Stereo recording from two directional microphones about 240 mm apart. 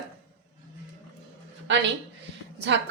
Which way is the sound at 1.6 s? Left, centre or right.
Right.